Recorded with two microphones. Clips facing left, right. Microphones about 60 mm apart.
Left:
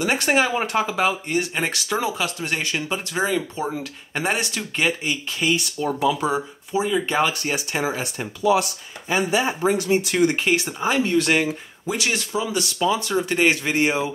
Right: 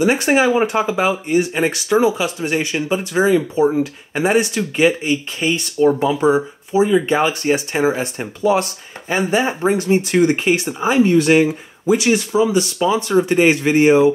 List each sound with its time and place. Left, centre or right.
0.0 s speech: centre
5.0 s speech: right
7.8 s speech: right
10.1 s speech: centre